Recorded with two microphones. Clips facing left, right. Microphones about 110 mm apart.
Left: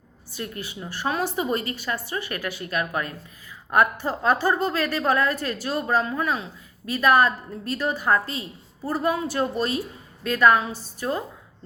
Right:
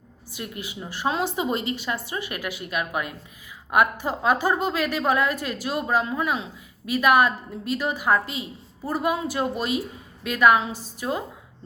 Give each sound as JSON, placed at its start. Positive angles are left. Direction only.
{"t": 0.3, "sound": "a woman's voice", "side_deg": -15}